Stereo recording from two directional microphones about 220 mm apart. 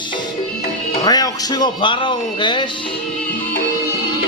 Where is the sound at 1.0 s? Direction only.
15° left (ahead or behind).